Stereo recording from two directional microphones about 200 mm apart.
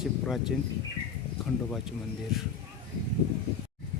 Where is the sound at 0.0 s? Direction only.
Centre (ahead or behind).